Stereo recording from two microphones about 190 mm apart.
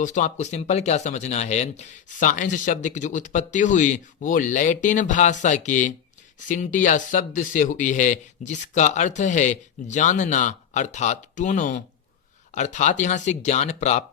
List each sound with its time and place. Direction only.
0.0 s speech: 40° left (ahead or behind)